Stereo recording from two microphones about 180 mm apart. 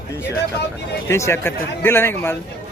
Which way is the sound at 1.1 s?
15° left (ahead or behind).